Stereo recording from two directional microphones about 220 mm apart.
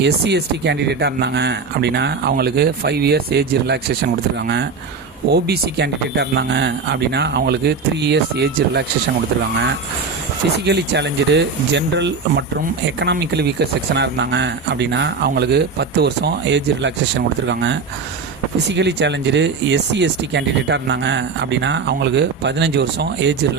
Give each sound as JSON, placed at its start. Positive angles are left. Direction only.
{"t": 0.0, "sound": "speech", "side_deg": -50}
{"t": 5.3, "sound": "speech", "side_deg": -50}
{"t": 10.7, "sound": "speech", "side_deg": -50}